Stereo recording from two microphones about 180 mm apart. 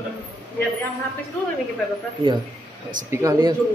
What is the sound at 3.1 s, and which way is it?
Speech, 15° right (ahead or behind).